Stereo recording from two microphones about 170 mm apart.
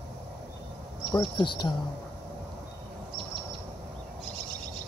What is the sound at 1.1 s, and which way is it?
Speech, 25° left (ahead or behind).